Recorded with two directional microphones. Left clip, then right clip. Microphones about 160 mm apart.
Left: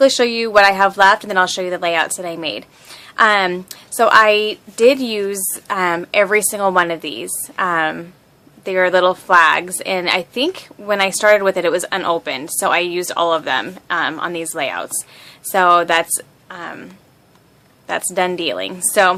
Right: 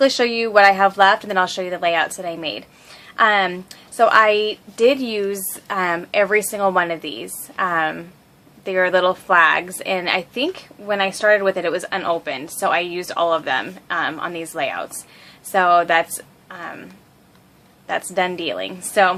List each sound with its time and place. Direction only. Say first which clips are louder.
0.0 s a woman's voice: left 3 dB; 20° left (ahead or behind)